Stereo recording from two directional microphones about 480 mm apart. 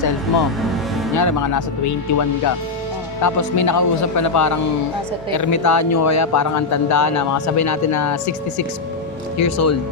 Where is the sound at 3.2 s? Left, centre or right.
Left.